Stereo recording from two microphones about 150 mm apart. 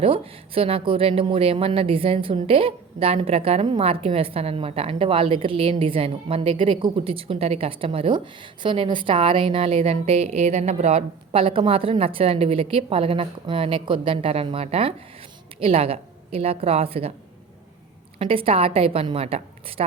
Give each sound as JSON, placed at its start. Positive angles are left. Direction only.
{"t": 0.0, "sound": "speech", "side_deg": -40}
{"t": 18.2, "sound": "speech", "side_deg": -35}